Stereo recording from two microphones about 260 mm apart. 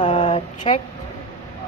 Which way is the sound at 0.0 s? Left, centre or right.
Centre.